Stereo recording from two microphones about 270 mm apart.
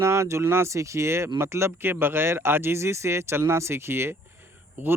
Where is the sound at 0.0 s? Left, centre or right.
Centre.